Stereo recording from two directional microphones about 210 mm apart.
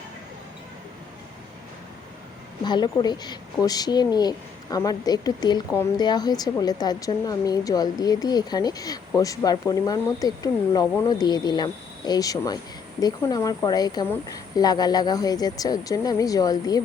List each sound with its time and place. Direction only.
2.6 s a woman's voice: 20° left (ahead or behind)